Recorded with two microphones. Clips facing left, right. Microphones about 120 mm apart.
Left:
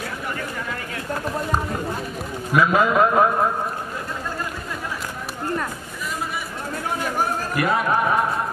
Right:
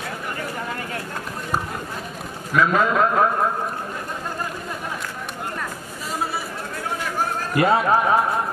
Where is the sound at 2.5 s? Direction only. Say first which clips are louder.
Left 1 dB; 10° left (ahead or behind).